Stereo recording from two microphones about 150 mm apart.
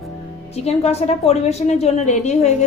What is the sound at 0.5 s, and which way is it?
A woman's voice, 45° left (ahead or behind).